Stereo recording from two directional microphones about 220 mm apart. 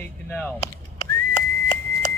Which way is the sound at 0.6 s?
30° left (ahead or behind).